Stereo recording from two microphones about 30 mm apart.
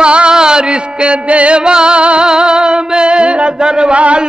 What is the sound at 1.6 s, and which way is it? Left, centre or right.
Music, right.